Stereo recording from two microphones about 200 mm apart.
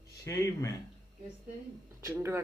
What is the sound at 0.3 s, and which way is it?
Speech, 15° left (ahead or behind).